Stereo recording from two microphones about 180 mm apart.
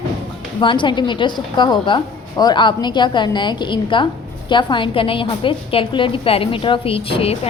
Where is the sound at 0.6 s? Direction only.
25° left (ahead or behind).